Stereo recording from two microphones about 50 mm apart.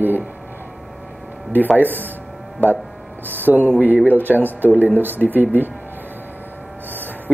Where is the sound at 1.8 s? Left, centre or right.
Right.